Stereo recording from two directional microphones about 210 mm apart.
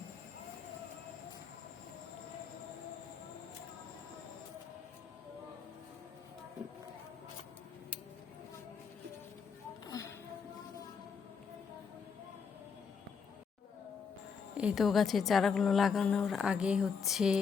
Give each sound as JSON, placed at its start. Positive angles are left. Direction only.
{"t": 9.8, "sound": "music", "side_deg": 15}
{"t": 14.5, "sound": "a woman's voice", "side_deg": -5}